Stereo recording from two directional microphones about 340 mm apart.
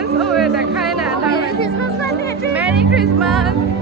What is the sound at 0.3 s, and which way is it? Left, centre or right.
Music, centre.